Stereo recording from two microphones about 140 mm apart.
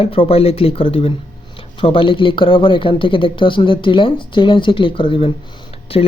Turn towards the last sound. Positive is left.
turn(degrees=45)  # may be behind; listen again after turning